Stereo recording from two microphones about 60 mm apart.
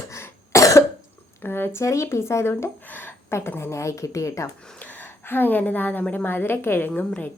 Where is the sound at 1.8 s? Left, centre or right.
Left.